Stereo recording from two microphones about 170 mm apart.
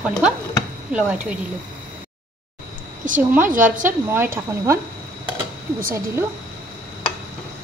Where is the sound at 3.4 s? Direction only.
50° right (ahead or behind).